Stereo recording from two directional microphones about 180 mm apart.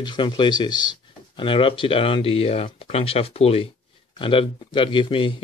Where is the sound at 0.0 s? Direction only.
25° left (ahead or behind).